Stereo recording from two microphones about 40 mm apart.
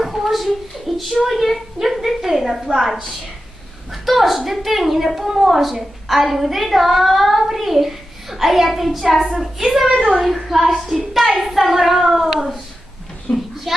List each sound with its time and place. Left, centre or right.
0.0 s a sound: centre
1.3 s a woman's voice: centre
13.3 s speech: left
13.7 s a child's voice: centre